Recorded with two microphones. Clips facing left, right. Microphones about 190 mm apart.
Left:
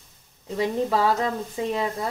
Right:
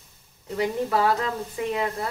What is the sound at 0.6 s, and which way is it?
Speech, 25° left (ahead or behind).